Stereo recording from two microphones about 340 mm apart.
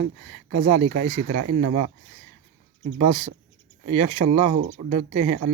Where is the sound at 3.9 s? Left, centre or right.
Centre.